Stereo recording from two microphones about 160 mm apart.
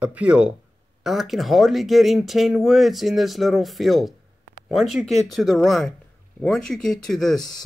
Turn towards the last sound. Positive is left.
turn(degrees=0)  # may be behind; listen again after turning